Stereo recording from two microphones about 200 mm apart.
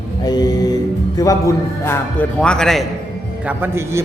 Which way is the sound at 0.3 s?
20° left (ahead or behind).